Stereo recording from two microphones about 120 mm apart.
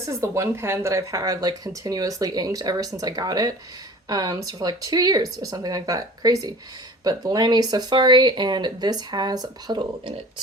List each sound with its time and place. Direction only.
0.0 s speech: 25° right (ahead or behind); by 10.2 s 40° right (ahead or behind)